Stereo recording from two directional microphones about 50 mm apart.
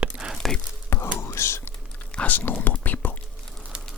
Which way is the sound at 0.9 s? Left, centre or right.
Left.